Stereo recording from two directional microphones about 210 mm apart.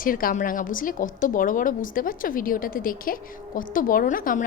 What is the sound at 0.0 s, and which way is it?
A woman's voice, 40° left (ahead or behind).